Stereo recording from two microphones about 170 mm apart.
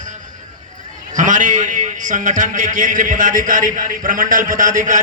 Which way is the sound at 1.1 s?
50° right (ahead or behind).